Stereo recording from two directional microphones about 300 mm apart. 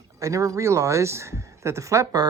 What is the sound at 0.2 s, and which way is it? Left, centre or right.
Speech, centre.